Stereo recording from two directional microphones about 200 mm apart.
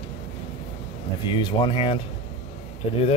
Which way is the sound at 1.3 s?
25° left (ahead or behind).